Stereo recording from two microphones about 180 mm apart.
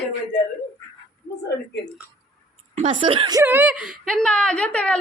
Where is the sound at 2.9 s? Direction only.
30° right (ahead or behind).